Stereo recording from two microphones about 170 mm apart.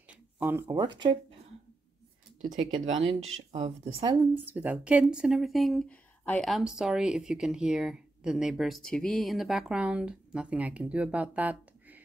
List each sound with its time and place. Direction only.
0.1 s speech: 10° right (ahead or behind)
2.4 s speech: 40° right (ahead or behind)
4.2 s speech: 10° right (ahead or behind)